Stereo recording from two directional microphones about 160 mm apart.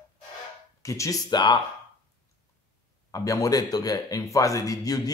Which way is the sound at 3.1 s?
20° left (ahead or behind).